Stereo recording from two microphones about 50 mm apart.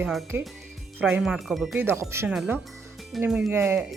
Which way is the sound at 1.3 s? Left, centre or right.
Centre.